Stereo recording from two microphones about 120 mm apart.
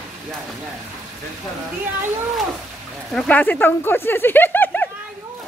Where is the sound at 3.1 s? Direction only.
10° left (ahead or behind).